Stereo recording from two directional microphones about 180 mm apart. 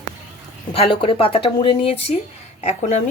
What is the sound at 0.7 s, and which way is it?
Speech, 30° left (ahead or behind).